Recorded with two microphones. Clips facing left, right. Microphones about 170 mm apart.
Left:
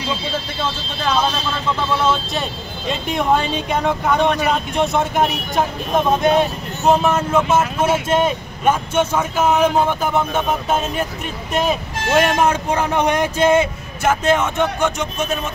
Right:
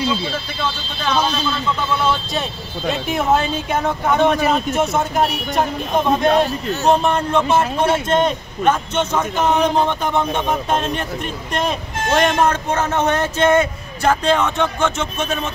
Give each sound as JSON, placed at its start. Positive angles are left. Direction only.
{"t": 2.9, "sound": "speech", "side_deg": -5}